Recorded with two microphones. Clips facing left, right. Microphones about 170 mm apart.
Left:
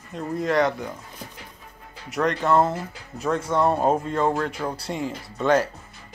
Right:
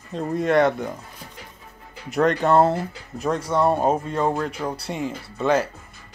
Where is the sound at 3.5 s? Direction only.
10° right (ahead or behind).